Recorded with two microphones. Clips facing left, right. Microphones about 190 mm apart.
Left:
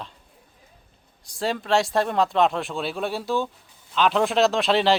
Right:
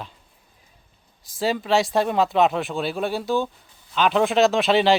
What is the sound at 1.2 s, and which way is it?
Speech, centre (ahead or behind).